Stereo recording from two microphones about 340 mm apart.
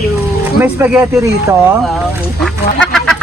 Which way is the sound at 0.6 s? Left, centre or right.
Centre.